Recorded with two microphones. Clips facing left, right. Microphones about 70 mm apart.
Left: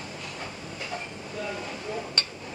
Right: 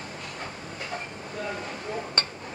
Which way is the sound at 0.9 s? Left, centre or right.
Right.